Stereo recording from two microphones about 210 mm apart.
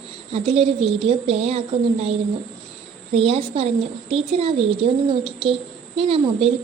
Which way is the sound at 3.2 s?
25° right (ahead or behind).